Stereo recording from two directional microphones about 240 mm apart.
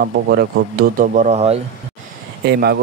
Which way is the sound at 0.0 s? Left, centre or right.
Right.